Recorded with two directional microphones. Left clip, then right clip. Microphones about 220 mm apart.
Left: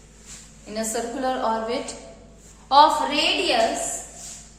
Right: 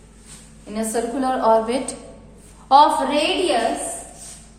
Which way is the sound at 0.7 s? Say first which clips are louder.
Right 4 dB; 20° right (ahead or behind).